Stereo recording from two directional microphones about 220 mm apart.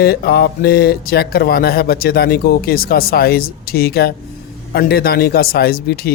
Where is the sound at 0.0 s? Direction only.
45° left (ahead or behind).